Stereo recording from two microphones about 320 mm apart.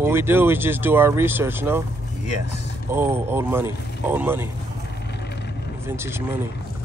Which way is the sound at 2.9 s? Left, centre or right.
Centre.